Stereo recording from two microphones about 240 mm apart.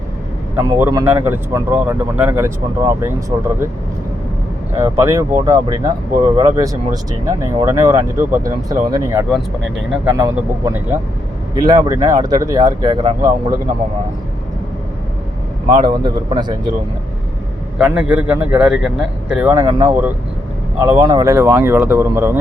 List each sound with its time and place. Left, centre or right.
0.5 s speech: centre
4.8 s speech: centre
15.7 s speech: centre
17.7 s a man's voice: centre